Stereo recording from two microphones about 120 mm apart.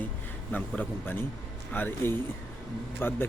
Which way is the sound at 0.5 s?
15° left (ahead or behind).